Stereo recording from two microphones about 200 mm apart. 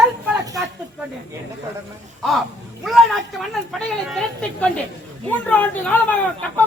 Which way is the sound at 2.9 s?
Centre (ahead or behind).